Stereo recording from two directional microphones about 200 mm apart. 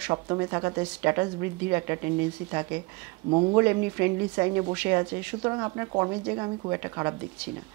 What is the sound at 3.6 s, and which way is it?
A woman's voice, 15° right (ahead or behind).